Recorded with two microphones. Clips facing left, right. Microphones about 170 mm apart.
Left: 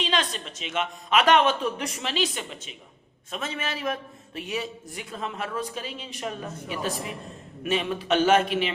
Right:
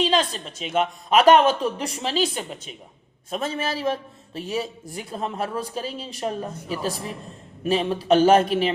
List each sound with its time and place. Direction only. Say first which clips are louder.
0.0 s a man's voice: right 6 dB; 35° right (ahead or behind)